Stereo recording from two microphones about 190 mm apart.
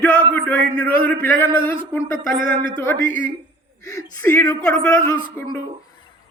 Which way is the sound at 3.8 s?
15° left (ahead or behind).